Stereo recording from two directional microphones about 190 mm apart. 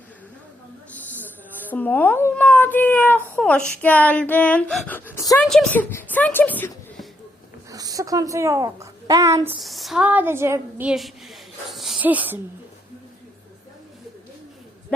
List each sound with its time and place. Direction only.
1.7 s speech: 10° left (ahead or behind)
5.4 s speech: 5° left (ahead or behind)
7.7 s a woman's voice: 20° right (ahead or behind)
9.6 s a woman's voice: centre (ahead or behind)